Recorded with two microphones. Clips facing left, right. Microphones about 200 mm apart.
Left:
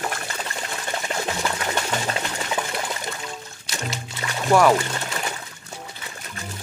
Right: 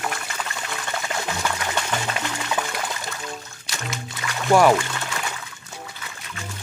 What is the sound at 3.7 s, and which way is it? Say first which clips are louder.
Music: left 1 dB; 25° left (ahead or behind).